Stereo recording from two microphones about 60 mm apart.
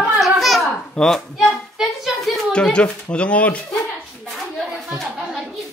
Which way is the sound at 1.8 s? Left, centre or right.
Centre.